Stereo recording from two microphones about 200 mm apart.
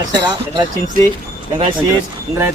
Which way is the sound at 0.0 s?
20° right (ahead or behind).